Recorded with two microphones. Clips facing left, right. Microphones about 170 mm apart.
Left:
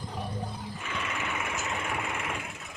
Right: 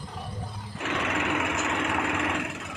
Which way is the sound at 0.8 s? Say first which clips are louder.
Right 9 dB; 75° right (ahead or behind).